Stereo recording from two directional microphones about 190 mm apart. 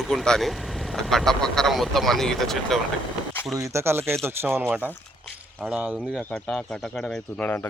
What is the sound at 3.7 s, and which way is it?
Speech, 15° right (ahead or behind).